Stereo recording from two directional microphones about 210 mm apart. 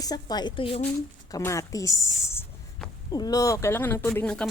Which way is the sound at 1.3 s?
15° left (ahead or behind).